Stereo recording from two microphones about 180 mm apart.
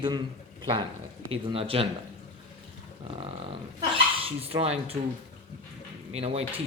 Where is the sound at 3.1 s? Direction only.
30° right (ahead or behind).